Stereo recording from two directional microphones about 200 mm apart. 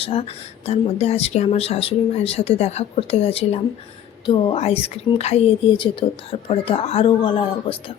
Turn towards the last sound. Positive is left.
turn(degrees=25)  # may be behind; listen again after turning